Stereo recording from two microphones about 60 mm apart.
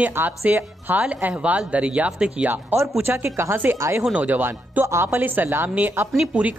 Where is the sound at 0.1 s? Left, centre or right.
Right; by 2.5 s centre.